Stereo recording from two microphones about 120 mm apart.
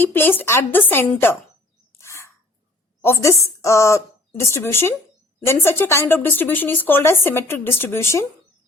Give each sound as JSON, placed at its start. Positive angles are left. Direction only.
{"t": 0.0, "sound": "a woman's voice", "side_deg": 15}
{"t": 1.9, "sound": "a sound", "side_deg": 20}
{"t": 3.0, "sound": "speech", "side_deg": 20}